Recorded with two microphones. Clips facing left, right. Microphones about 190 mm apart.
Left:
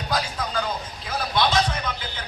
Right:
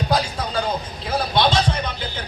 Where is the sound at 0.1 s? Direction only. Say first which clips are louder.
Right 1 dB; 30° right (ahead or behind).